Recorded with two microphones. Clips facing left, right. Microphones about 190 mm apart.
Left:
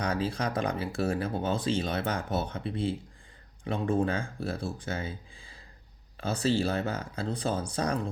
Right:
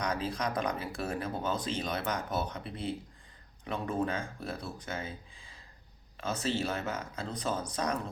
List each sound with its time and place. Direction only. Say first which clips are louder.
0.0 s speech: left 3 dB; 30° left (ahead or behind)